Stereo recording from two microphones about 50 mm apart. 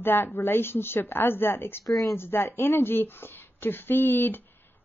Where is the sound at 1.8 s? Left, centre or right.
Left.